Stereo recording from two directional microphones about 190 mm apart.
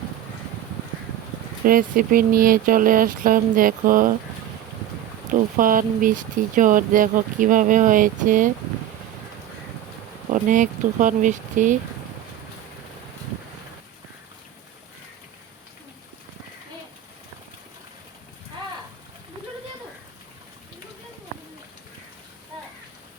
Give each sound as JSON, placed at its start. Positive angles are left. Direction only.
{"t": 1.6, "sound": "speech", "side_deg": -50}
{"t": 5.3, "sound": "speech", "side_deg": -45}
{"t": 10.3, "sound": "speech", "side_deg": -45}